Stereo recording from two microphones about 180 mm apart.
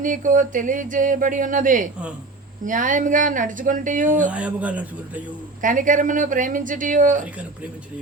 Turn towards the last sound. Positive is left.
turn(degrees=-45)  # may be behind; listen again after turning